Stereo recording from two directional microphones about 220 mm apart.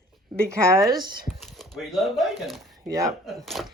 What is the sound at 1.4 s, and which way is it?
Speech, centre (ahead or behind).